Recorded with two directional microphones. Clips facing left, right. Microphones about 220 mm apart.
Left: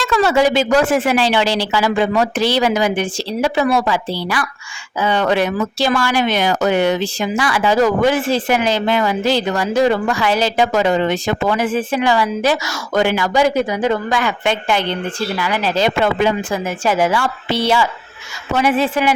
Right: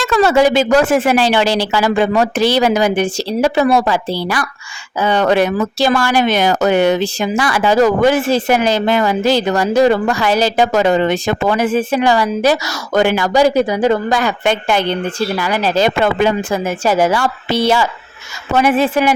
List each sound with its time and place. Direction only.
0.0 s speech: 45° right (ahead or behind)